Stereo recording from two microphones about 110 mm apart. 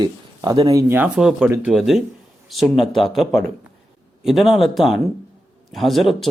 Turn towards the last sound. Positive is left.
turn(degrees=0)  # may be behind; listen again after turning